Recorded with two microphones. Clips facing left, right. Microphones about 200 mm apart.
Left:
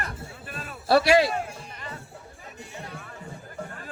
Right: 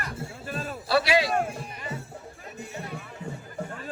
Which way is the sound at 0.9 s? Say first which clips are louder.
Left 4 dB; 50° left (ahead or behind).